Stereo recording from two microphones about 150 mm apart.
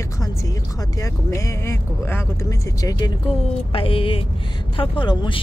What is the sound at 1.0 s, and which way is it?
Speech, 20° left (ahead or behind).